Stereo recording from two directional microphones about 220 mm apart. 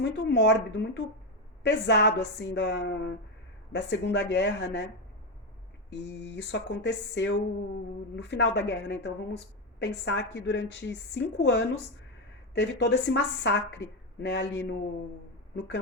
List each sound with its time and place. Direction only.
0.0 s a woman's voice: 50° left (ahead or behind)
5.9 s a woman's voice: 50° left (ahead or behind)